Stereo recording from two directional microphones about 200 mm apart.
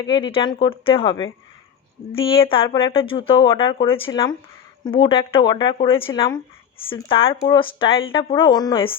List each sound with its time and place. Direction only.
0.0 s speech: 25° left (ahead or behind)